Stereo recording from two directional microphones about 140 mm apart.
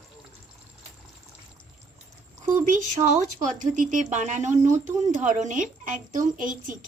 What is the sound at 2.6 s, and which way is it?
Speech, 65° right (ahead or behind).